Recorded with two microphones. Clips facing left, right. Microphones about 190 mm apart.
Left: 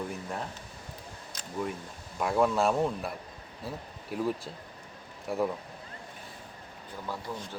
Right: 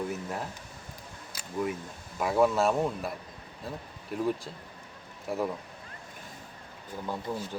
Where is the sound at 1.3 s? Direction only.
5° right (ahead or behind).